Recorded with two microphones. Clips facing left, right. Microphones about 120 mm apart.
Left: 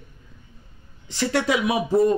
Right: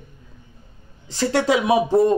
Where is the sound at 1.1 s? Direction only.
30° right (ahead or behind).